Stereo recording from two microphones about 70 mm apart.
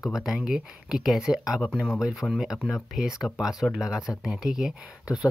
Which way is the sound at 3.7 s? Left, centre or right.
Centre.